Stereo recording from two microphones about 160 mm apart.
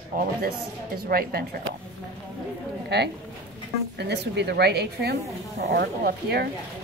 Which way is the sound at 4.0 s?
90° right.